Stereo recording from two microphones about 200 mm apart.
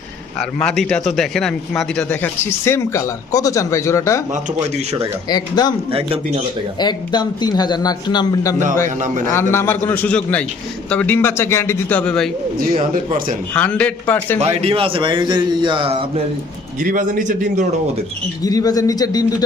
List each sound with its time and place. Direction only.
0.3 s a man's voice: centre (ahead or behind)
5.3 s a man's voice: 20° left (ahead or behind)
5.9 s a man's voice: 30° right (ahead or behind)
6.7 s a man's voice: 20° left (ahead or behind); by 12.3 s 5° left (ahead or behind)
12.5 s speech: 45° right (ahead or behind)
13.5 s a man's voice: 5° left (ahead or behind)
14.3 s a man's voice: 30° right (ahead or behind)
16.8 s speech: 40° right (ahead or behind)
18.4 s a man's voice: 20° left (ahead or behind)